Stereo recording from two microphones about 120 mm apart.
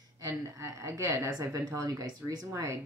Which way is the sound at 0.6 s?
25° right (ahead or behind).